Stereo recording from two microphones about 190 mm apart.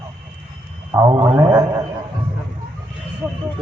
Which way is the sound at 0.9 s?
20° right (ahead or behind).